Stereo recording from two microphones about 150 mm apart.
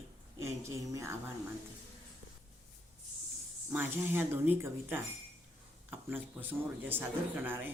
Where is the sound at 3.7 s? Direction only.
15° right (ahead or behind).